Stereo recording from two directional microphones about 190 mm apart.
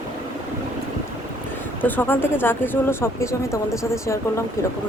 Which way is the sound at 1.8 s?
10° left (ahead or behind).